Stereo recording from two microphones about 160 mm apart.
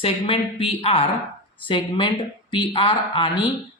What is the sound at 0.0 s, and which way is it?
A woman's voice, 35° left (ahead or behind).